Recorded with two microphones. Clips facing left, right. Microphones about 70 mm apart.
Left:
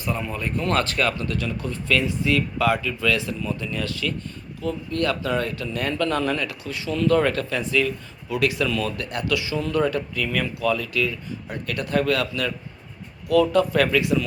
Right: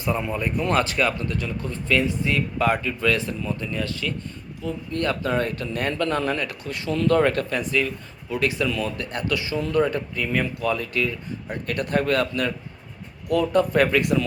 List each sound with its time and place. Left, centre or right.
0.2 s speech: centre; by 7.2 s right
7.2 s speech: right
9.1 s speech: right
13.5 s speech: right
14.0 s speech: right